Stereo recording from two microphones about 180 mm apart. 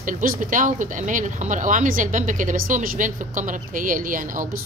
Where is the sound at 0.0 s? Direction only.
50° right (ahead or behind).